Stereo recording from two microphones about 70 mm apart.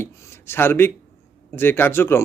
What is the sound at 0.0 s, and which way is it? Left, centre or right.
Speech, left.